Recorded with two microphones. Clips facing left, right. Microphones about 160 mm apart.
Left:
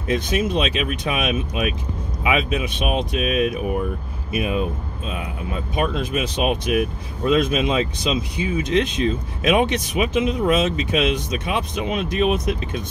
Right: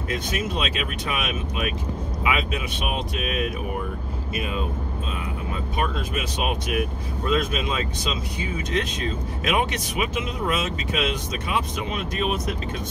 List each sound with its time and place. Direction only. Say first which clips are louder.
0.1 s speech: left 7 dB; 20° left (ahead or behind)
5.8 s speech: left 5 dB; 20° left (ahead or behind)